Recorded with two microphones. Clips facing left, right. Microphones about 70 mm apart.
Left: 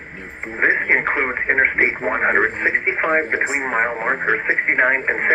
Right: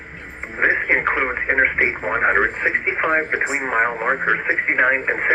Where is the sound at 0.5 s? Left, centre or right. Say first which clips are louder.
Left 1 dB; left.